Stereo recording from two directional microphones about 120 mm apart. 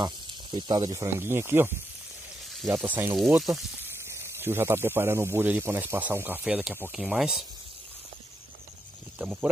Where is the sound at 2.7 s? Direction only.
15° right (ahead or behind).